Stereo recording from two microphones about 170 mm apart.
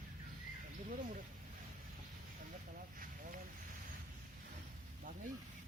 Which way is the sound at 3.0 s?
55° right (ahead or behind).